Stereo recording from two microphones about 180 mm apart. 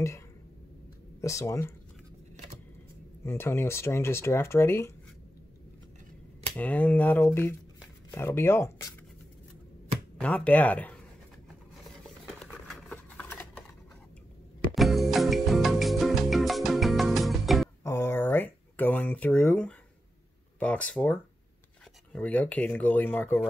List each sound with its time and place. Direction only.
1.2 s speech: 15° left (ahead or behind)
3.3 s speech: 15° left (ahead or behind)
6.5 s speech: 10° left (ahead or behind)
10.1 s speech: 5° left (ahead or behind)
12.4 s a sound: 5° left (ahead or behind)
14.8 s music: centre (ahead or behind)
17.8 s a sound: 15° left (ahead or behind)
20.5 s speech: 5° left (ahead or behind)